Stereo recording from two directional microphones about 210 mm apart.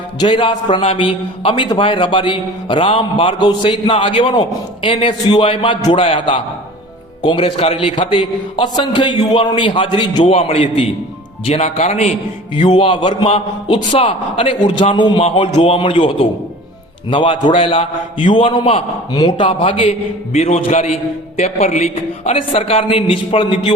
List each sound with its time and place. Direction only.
0.2 s a man's voice: 20° left (ahead or behind)
12.5 s a man's voice: 20° left (ahead or behind)